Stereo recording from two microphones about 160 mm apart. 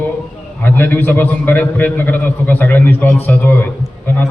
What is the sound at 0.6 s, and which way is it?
A man's voice, 10° left (ahead or behind).